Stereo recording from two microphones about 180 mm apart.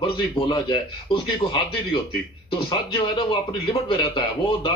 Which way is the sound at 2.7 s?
30° left (ahead or behind).